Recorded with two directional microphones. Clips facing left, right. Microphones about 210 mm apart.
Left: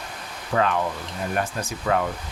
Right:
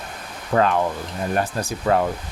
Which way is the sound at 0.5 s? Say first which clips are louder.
Right 4 dB; 35° right (ahead or behind).